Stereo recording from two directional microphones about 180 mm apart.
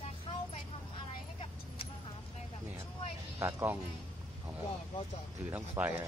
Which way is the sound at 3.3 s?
10° right (ahead or behind).